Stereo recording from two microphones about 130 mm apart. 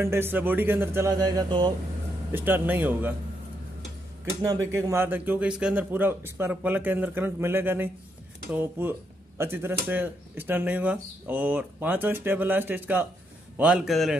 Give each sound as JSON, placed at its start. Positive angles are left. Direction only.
{"t": 0.0, "sound": "speech", "side_deg": -20}
{"t": 1.1, "sound": "speech", "side_deg": -30}
{"t": 2.3, "sound": "speech", "side_deg": -15}
{"t": 4.4, "sound": "a man's voice", "side_deg": -25}